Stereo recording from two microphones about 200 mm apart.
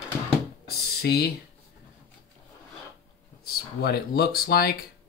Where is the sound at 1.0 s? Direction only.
55° left (ahead or behind).